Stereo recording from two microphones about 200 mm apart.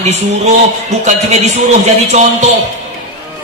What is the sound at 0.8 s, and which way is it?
Mantra, 35° right (ahead or behind).